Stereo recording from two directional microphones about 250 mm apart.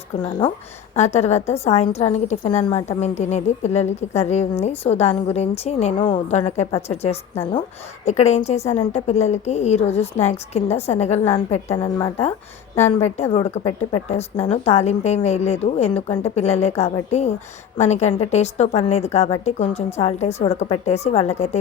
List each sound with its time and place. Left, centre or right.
0.9 s a woman's voice: left